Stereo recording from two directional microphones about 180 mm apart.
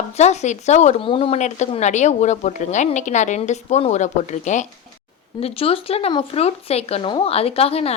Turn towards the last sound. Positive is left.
turn(degrees=35)  # may be behind; listen again after turning